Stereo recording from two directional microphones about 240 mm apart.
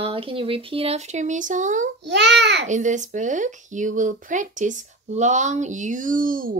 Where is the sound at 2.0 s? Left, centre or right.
Right.